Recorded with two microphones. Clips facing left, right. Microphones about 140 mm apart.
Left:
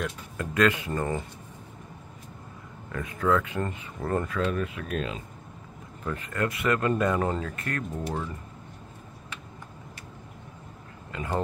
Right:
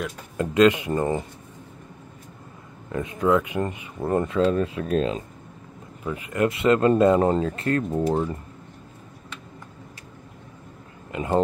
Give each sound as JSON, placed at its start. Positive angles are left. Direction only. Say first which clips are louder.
{"t": 0.4, "sound": "speech", "louder": "right 6 dB", "side_deg": -20}
{"t": 2.9, "sound": "speech", "louder": "right 4 dB", "side_deg": -25}
{"t": 6.0, "sound": "speech", "louder": "right 6 dB", "side_deg": -10}
{"t": 11.1, "sound": "speech", "louder": "right 7 dB", "side_deg": -20}